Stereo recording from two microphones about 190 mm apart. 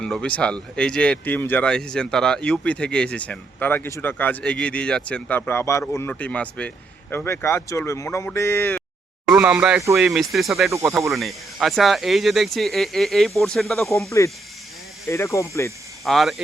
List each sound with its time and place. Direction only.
0.0 s speech: 5° left (ahead or behind)
9.3 s speech: 10° right (ahead or behind)
10.7 s speech: 15° right (ahead or behind)
11.1 s speech: centre (ahead or behind)
14.2 s speech: 15° left (ahead or behind)
16.0 s speech: centre (ahead or behind)